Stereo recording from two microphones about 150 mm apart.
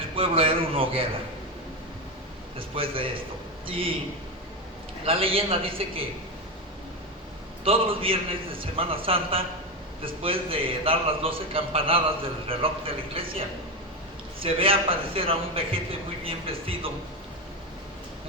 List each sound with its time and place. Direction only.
0.2 s a man's voice: 40° right (ahead or behind)
2.6 s a man's voice: 35° right (ahead or behind)
5.0 s a man's voice: 40° right (ahead or behind)
7.6 s a man's voice: 35° right (ahead or behind)
14.3 s a man's voice: 40° right (ahead or behind)